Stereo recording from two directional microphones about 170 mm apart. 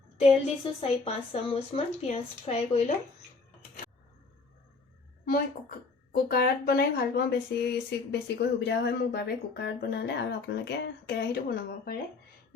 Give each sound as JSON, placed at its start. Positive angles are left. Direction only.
{"t": 0.2, "sound": "speech", "side_deg": 35}
{"t": 6.1, "sound": "speech", "side_deg": 65}